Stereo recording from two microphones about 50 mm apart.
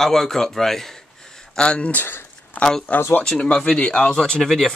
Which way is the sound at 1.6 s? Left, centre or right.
Left.